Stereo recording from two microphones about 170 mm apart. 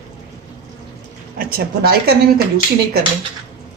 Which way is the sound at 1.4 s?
60° right (ahead or behind).